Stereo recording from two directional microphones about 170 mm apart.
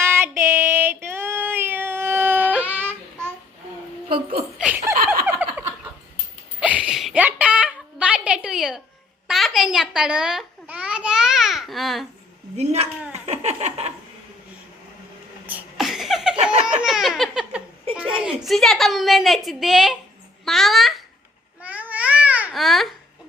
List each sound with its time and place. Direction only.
0.0 s female singing: 15° right (ahead or behind)
1.0 s baby cry: 15° right (ahead or behind)
4.5 s laughter: 5° right (ahead or behind)
5.2 s a sound: 10° right (ahead or behind)
9.2 s babbling: centre (ahead or behind)
12.5 s speech: 40° right (ahead or behind)
13.1 s a sound: 40° right (ahead or behind)
15.4 s a sound: 5° right (ahead or behind)
16.3 s laughter: 30° right (ahead or behind)
16.6 s laughter: 5° right (ahead or behind)
18.3 s a woman's voice: centre (ahead or behind)
20.4 s babbling: centre (ahead or behind)